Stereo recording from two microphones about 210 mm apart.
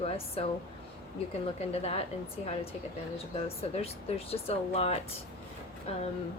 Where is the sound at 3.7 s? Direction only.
30° left (ahead or behind).